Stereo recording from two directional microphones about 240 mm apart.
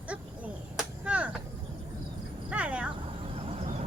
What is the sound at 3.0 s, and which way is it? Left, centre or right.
Vehicle, right.